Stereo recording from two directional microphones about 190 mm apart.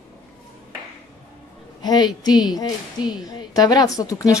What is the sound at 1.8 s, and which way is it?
A woman's voice, 20° left (ahead or behind).